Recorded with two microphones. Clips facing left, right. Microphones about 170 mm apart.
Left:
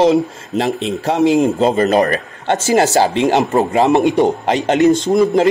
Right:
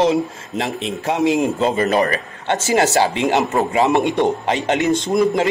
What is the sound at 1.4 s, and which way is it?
Speech, 35° left (ahead or behind).